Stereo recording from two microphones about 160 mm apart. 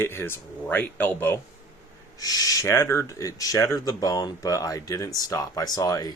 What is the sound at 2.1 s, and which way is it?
Speech, 25° left (ahead or behind).